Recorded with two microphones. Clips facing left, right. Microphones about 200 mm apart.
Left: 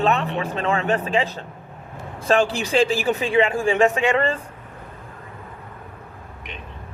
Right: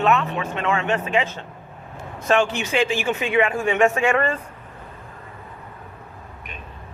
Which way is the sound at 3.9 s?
15° left (ahead or behind).